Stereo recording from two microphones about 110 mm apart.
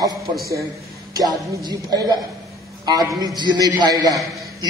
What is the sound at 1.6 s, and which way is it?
A man's voice, 40° right (ahead or behind).